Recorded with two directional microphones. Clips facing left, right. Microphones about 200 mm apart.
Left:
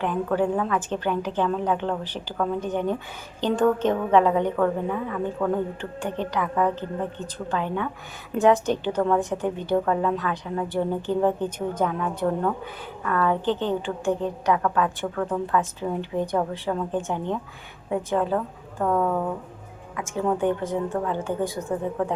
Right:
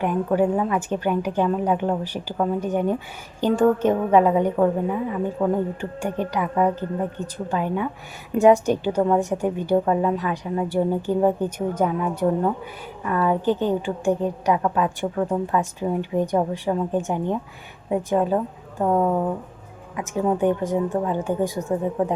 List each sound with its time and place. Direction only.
0.0 s a woman's voice: 10° right (ahead or behind)